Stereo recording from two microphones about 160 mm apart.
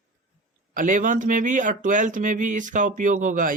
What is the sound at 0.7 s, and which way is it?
Speech, 55° right (ahead or behind).